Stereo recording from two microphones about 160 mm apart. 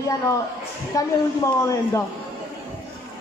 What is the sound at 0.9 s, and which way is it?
Speech, 20° left (ahead or behind).